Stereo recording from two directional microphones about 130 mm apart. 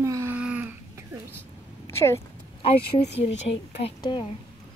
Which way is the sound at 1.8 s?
20° left (ahead or behind).